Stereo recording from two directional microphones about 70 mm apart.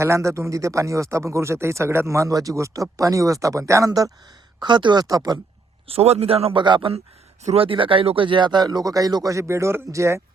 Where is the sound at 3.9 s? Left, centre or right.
Right.